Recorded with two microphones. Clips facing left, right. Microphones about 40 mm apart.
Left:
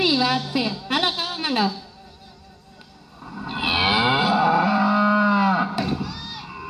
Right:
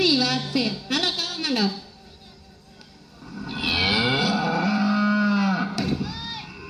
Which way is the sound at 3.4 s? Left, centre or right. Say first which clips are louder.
Left 3 dB; centre.